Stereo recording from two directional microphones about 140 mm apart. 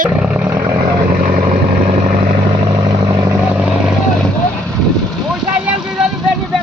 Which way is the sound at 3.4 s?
10° right (ahead or behind).